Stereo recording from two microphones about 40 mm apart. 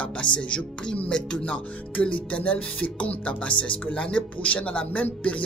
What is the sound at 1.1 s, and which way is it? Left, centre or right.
Music, left.